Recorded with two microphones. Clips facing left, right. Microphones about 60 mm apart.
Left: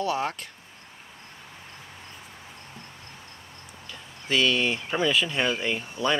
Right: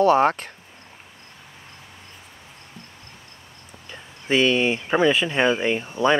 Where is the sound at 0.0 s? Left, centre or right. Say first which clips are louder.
Right 11 dB; right.